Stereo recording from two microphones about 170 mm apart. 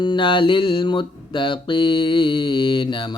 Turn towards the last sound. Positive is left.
turn(degrees=30)  # may be behind; listen again after turning